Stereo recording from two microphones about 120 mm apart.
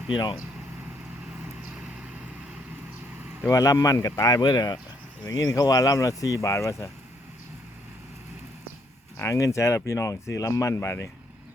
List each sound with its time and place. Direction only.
0.1 s speech: 40° left (ahead or behind)
3.4 s speech: 30° left (ahead or behind)
9.1 s speech: 25° left (ahead or behind)